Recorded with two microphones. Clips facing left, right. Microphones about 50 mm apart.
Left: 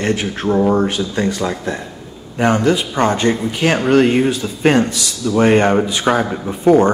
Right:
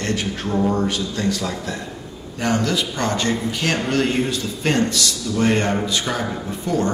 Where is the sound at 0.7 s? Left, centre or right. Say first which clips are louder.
Left 5 dB; left; by 5.4 s centre.